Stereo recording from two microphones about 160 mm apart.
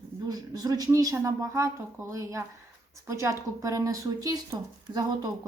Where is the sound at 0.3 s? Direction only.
25° right (ahead or behind).